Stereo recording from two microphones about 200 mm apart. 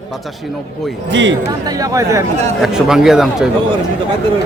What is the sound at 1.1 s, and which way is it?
Speech, 65° right (ahead or behind).